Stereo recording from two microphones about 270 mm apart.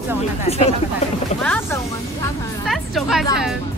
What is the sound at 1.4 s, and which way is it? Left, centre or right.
A woman's voice, centre.